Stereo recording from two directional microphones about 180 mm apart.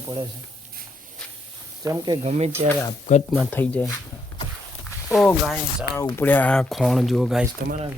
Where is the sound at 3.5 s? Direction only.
10° left (ahead or behind).